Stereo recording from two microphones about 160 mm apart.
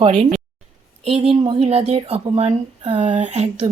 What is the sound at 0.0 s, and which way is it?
Speech, 40° right (ahead or behind).